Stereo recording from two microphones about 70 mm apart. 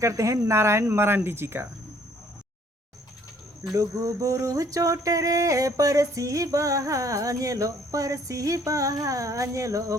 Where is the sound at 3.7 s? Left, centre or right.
Right.